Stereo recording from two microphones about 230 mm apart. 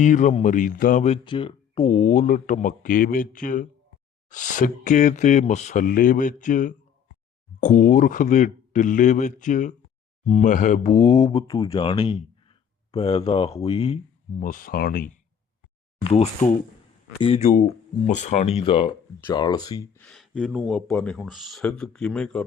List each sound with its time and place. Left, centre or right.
0.0 s speech: left
10.9 s speech: centre; by 15.2 s left
16.0 s speech: left; by 22.4 s centre